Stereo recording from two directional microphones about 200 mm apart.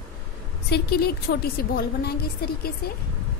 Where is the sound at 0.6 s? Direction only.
55° left (ahead or behind).